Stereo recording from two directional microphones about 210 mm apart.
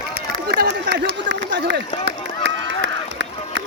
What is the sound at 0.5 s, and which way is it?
Run, 50° right (ahead or behind).